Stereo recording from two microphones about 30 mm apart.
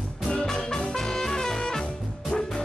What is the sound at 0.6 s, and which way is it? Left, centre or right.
Music, left.